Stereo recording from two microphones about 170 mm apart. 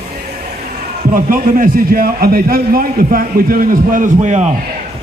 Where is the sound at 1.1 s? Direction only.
55° right (ahead or behind).